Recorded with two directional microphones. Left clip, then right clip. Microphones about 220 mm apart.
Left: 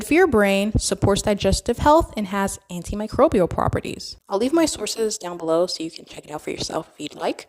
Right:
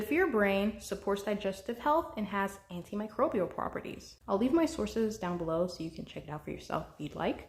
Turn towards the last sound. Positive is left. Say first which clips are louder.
# left 9 dB
turn(degrees=55)  # may be behind; listen again after turning